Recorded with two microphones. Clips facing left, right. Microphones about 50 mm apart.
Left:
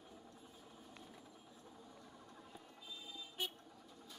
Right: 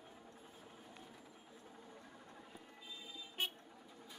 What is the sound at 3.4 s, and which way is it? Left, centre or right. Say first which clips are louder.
Vehicle: right 3 dB; right.